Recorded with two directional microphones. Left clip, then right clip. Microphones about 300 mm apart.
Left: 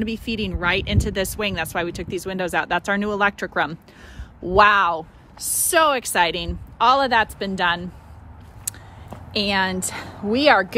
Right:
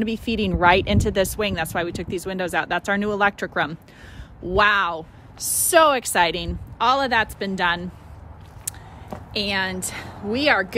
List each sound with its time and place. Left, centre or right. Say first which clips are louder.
0.0 s speech: right 2 dB; centre
9.3 s a woman's voice: left 3 dB; centre